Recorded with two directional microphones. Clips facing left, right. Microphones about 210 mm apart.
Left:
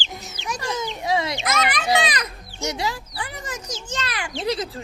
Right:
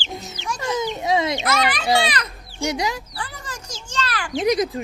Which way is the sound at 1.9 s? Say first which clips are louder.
Right 1 dB; 15° left (ahead or behind).